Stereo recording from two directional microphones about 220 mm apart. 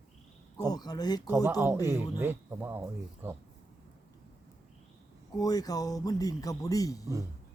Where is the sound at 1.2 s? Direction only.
10° right (ahead or behind).